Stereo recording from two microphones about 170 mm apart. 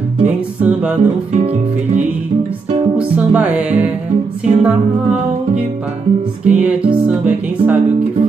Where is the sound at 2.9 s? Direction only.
10° right (ahead or behind).